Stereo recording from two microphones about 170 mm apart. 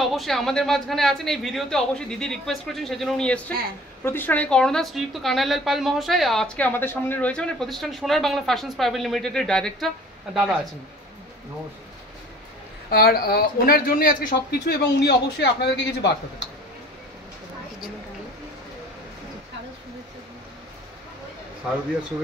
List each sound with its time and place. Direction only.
0.0 s a woman's voice: centre (ahead or behind)
12.9 s speech: 65° left (ahead or behind); by 16.4 s 85° left